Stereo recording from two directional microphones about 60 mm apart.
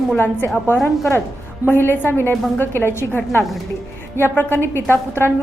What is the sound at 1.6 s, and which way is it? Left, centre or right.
A woman's voice, left.